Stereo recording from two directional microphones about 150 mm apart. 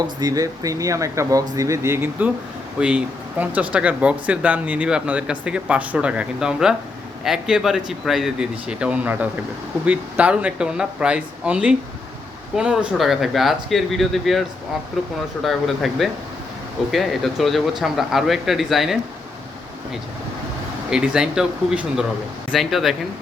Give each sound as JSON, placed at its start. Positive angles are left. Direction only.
{"t": 0.2, "sound": "speech", "side_deg": -25}
{"t": 15.4, "sound": "speech", "side_deg": 0}
{"t": 20.9, "sound": "speech", "side_deg": -5}